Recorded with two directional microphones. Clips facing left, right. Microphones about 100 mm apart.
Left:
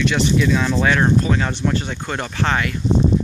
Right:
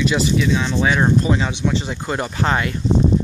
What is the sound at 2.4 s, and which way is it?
Speech, 25° right (ahead or behind).